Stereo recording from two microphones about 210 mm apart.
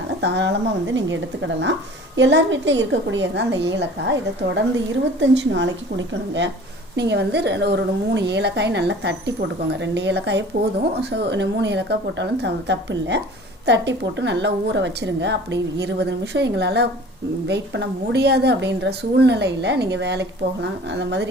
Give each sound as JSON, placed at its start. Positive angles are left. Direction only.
{"t": 0.2, "sound": "a woman's voice", "side_deg": -55}
{"t": 6.9, "sound": "a woman's voice", "side_deg": -55}